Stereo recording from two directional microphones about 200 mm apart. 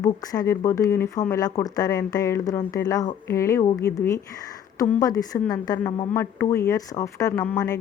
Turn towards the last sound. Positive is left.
turn(degrees=10)  # may be behind; listen again after turning